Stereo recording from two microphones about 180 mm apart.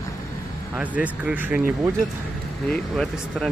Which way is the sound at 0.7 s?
10° right (ahead or behind).